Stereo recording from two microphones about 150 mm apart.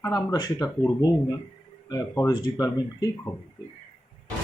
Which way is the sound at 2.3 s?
25° left (ahead or behind).